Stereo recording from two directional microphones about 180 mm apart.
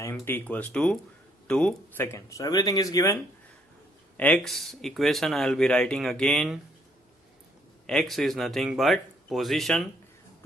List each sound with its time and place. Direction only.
0.0 s speech: 10° left (ahead or behind)
2.1 s speech: 15° left (ahead or behind)
4.2 s speech: 5° left (ahead or behind)
7.9 s speech: centre (ahead or behind)